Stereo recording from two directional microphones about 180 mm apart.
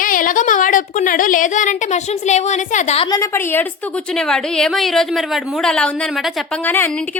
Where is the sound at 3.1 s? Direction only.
15° left (ahead or behind).